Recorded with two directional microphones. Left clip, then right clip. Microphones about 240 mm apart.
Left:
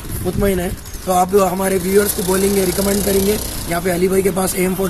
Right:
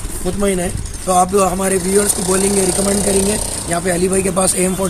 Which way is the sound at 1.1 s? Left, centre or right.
Centre.